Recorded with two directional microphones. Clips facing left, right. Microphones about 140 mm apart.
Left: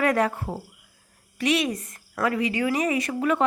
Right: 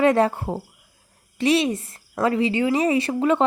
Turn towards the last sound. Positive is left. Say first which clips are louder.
# right 4 dB
turn(degrees=-25)  # may be behind; listen again after turning